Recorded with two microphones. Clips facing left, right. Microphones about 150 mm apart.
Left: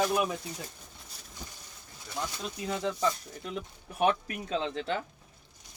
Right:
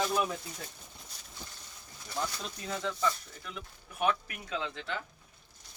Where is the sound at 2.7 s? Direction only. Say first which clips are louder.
Left 3 dB; 20° left (ahead or behind).